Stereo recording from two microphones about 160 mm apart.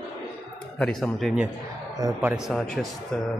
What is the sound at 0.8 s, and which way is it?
Speech, centre (ahead or behind).